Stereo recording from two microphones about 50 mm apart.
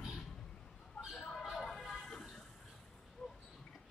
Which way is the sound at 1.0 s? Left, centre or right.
Left.